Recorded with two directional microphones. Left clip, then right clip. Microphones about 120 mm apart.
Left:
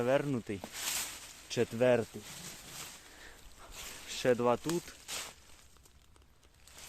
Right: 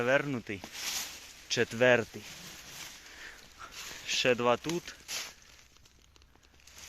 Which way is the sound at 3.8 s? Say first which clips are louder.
Right 7 dB; 15° left (ahead or behind).